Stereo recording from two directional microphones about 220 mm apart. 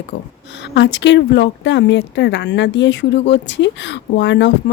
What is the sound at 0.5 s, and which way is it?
Speech, 55° left (ahead or behind).